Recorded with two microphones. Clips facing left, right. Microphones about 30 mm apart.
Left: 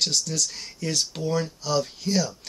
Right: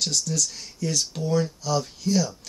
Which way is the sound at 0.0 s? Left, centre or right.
Left.